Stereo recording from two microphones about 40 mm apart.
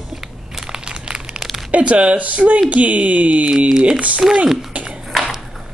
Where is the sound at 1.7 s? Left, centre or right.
Right.